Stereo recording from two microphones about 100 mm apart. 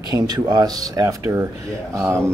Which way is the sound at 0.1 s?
45° right (ahead or behind).